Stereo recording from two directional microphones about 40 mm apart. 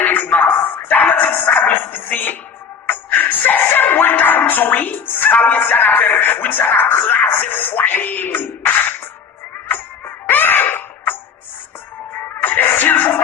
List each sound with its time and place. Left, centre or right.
0.0 s music: left
3.6 s music: left
10.2 s a sound: left
12.4 s music: left